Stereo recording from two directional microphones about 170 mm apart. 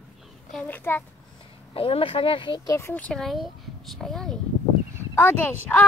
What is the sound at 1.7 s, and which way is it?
Speech, 35° left (ahead or behind).